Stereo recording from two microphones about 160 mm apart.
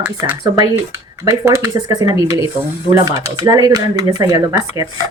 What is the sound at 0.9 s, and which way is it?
Speech, 20° right (ahead or behind).